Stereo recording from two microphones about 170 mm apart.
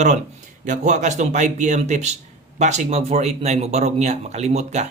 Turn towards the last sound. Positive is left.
turn(degrees=-40)  # may be behind; listen again after turning